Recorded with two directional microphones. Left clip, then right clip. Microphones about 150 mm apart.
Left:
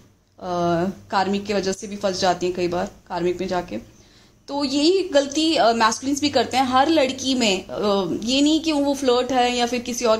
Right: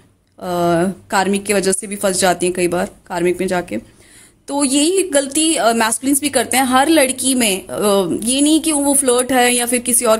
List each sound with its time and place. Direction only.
0.4 s a woman's voice: 40° right (ahead or behind)